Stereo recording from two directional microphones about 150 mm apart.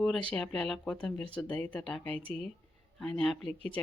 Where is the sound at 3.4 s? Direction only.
40° right (ahead or behind).